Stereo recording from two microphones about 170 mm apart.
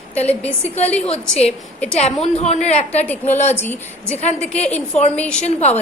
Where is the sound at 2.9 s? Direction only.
10° left (ahead or behind).